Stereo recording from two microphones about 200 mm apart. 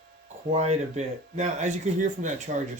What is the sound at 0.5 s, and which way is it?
Speech, 35° right (ahead or behind).